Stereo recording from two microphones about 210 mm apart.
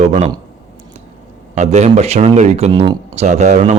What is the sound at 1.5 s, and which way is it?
Speech, 35° right (ahead or behind).